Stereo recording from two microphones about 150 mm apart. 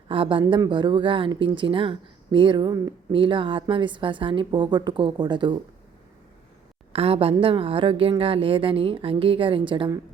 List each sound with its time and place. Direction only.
0.1 s speech: 35° right (ahead or behind)
6.9 s speech: 40° right (ahead or behind)